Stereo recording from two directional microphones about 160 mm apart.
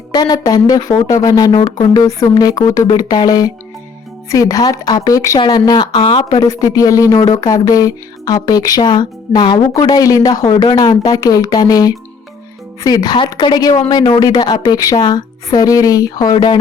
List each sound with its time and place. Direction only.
0.1 s speech: 25° left (ahead or behind)